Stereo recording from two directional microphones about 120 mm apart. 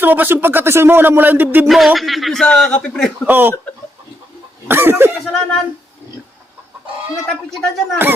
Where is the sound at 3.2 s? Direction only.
15° right (ahead or behind).